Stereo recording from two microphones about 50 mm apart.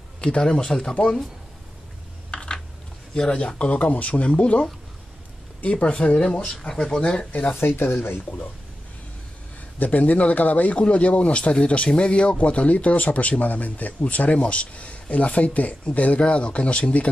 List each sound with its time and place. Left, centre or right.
0.2 s speech: centre
2.3 s typing: centre
3.2 s speech: centre
6.4 s speech: centre
7.6 s speech: left
9.8 s speech: left